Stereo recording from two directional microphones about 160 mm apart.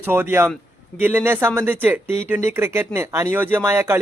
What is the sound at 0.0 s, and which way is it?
Speech, 15° right (ahead or behind).